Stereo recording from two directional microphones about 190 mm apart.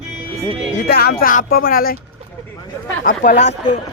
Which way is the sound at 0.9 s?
55° left (ahead or behind).